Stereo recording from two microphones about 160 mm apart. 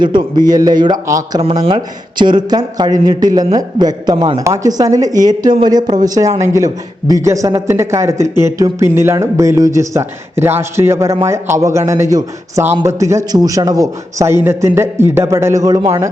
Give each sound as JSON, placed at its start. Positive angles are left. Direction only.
{"t": 0.0, "sound": "speech", "side_deg": -30}
{"t": 1.4, "sound": "a man's voice", "side_deg": -35}